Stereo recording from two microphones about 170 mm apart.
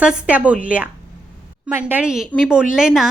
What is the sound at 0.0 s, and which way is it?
A woman's voice, 5° right (ahead or behind).